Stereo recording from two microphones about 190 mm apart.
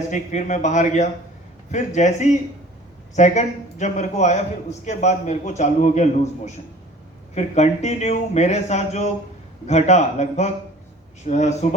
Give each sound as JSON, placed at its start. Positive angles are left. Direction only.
{"t": 0.1, "sound": "speech", "side_deg": 40}